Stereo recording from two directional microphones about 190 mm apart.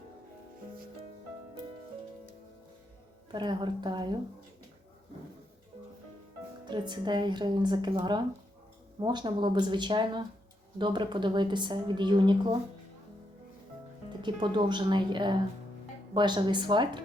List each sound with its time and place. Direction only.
3.3 s a woman's voice: 25° right (ahead or behind)
6.7 s a woman's voice: 25° right (ahead or behind)
14.2 s a woman's voice: 25° right (ahead or behind)